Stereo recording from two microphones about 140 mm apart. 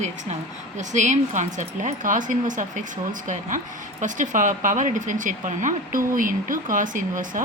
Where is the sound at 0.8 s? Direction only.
60° right (ahead or behind).